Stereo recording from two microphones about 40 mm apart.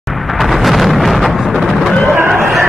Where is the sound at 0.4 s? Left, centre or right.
Centre.